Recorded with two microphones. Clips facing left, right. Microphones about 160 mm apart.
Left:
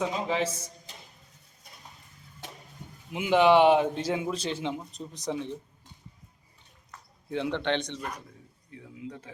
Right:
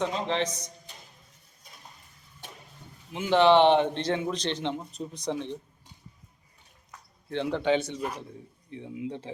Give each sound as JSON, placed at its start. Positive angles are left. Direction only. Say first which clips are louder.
{"t": 0.0, "sound": "speech", "louder": "even", "side_deg": 5}
{"t": 3.1, "sound": "a man's voice", "louder": "even", "side_deg": 10}
{"t": 7.3, "sound": "speech", "louder": "right 3 dB", "side_deg": 0}
{"t": 8.7, "sound": "speech", "louder": "right 6 dB", "side_deg": -25}